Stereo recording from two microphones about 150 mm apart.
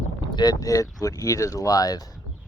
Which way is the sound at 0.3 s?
25° left (ahead or behind).